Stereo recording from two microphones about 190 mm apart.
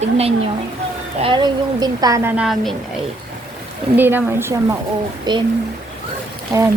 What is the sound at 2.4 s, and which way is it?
Speech, centre (ahead or behind).